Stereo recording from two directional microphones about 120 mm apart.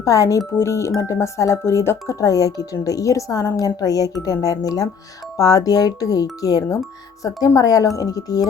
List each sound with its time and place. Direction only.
0.0 s a woman's voice: 25° left (ahead or behind)